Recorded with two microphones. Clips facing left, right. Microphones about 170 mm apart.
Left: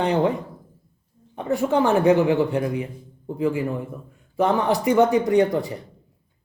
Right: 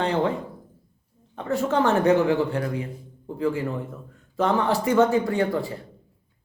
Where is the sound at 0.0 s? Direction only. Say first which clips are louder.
Left 3 dB; 15° left (ahead or behind).